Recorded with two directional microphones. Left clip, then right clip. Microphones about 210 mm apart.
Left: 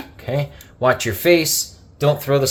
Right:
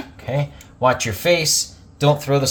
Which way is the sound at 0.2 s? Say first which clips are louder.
Left 1 dB; 30° left (ahead or behind).